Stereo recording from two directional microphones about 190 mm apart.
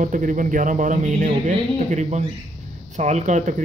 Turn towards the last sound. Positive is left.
turn(degrees=-40)  # may be behind; listen again after turning